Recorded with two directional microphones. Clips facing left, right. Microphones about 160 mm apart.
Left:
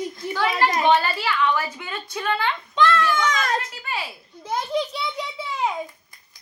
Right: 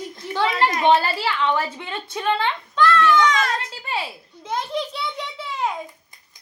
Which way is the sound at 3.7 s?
30° right (ahead or behind).